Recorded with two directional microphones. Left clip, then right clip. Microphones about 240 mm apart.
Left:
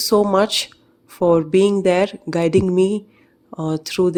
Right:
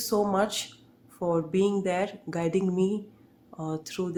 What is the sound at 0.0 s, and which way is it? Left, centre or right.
A woman's voice, left.